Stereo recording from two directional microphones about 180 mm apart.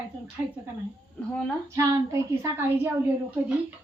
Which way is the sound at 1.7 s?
15° right (ahead or behind).